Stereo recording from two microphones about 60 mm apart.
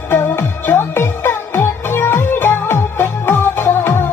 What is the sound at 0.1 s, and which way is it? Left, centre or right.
Music, left.